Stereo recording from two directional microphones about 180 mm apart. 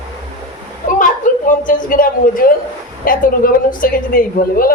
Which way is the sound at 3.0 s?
50° left (ahead or behind).